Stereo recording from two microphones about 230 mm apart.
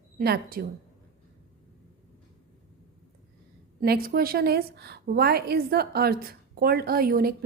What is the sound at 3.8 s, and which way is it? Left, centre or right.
A woman's voice, right.